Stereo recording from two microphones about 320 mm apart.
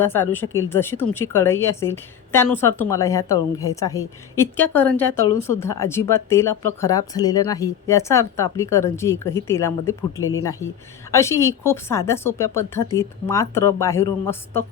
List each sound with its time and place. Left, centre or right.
0.0 s a woman's voice: centre
11.1 s a woman's voice: centre